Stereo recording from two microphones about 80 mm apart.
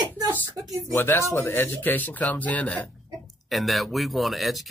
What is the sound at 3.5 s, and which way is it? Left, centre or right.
Speech, centre.